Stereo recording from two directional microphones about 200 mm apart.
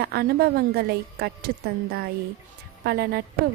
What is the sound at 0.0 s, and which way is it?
A woman's voice, 50° right (ahead or behind).